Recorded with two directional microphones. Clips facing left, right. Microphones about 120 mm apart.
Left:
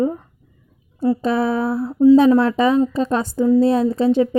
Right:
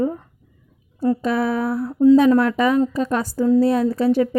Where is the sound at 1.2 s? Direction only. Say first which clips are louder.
Left 2 dB; 25° left (ahead or behind).